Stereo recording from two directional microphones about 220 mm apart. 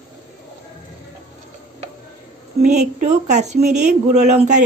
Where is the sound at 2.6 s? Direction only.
30° right (ahead or behind).